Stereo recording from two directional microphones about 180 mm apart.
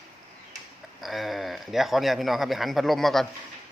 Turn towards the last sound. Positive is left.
turn(degrees=0)  # may be behind; listen again after turning